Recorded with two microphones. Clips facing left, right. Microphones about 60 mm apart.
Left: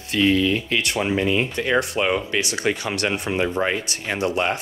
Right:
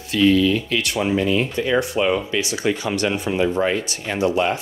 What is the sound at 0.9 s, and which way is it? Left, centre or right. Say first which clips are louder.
Speech: right 2 dB; centre.